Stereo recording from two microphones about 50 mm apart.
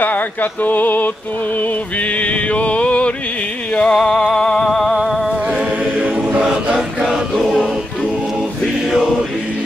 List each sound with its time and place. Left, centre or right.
0.0 s a sound: left
2.1 s music: left; by 4.9 s centre
5.5 s music: right
6.4 s choir: centre